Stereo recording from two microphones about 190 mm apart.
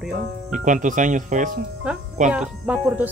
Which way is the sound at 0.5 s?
40° right (ahead or behind).